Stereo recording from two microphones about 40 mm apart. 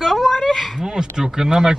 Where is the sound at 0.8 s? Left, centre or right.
Centre.